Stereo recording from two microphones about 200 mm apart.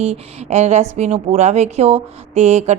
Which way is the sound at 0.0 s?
35° right (ahead or behind).